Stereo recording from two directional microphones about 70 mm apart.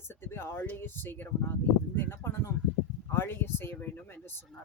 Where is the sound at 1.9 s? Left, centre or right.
Left.